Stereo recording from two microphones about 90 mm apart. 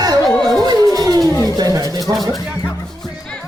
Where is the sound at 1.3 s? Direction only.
35° left (ahead or behind).